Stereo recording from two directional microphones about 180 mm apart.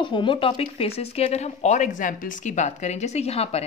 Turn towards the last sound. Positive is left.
turn(degrees=35)  # may be behind; listen again after turning